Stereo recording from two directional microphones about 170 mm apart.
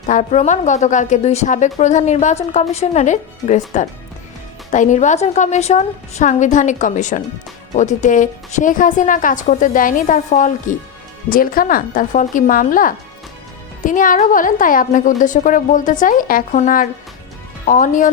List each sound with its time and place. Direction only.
0.1 s a woman's voice: 45° left (ahead or behind)